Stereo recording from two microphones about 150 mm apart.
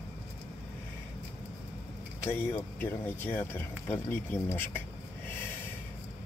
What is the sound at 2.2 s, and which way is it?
Speech, 15° left (ahead or behind).